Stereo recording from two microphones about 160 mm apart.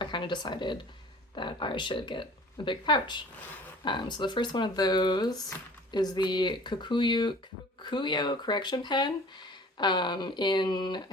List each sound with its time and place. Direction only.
0.0 s speech: 30° left (ahead or behind)